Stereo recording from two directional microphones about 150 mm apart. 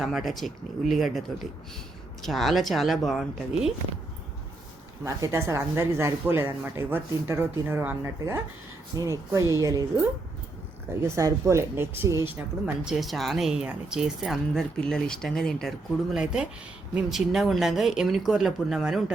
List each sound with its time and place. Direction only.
0.0 s speech: centre (ahead or behind)
2.2 s speech: centre (ahead or behind)
5.0 s speech: 20° right (ahead or behind)
11.0 s speech: 20° right (ahead or behind); by 19.1 s 5° right (ahead or behind)